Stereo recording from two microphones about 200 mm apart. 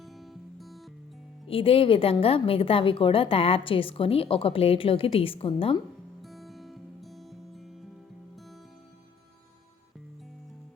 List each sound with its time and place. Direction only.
0.0 s music: centre (ahead or behind)
1.5 s a woman's voice: 30° left (ahead or behind)
6.2 s music: centre (ahead or behind)